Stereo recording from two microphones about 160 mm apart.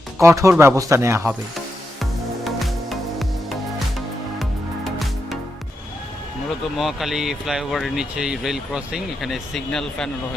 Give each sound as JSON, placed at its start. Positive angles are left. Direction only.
{"t": 0.2, "sound": "a man's voice", "side_deg": -20}
{"t": 2.0, "sound": "music", "side_deg": 0}
{"t": 6.7, "sound": "speech", "side_deg": 0}